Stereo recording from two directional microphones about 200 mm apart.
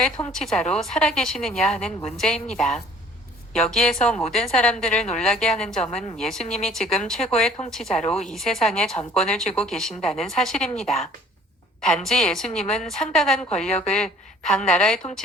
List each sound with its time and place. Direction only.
0.0 s a woman's voice: 5° left (ahead or behind)
6.4 s speech: 35° left (ahead or behind)
6.7 s a woman's voice: centre (ahead or behind)
8.0 s speech: 35° left (ahead or behind)
8.3 s a woman's voice: centre (ahead or behind)